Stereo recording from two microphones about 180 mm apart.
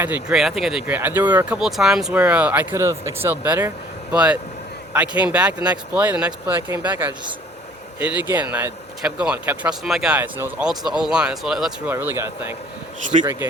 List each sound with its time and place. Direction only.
0.0 s speech: 5° right (ahead or behind)
13.1 s speech: 35° right (ahead or behind)